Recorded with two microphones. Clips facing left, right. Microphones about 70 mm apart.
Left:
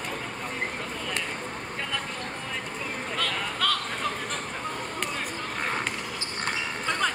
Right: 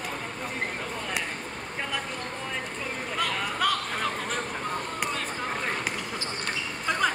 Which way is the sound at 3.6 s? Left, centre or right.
Centre.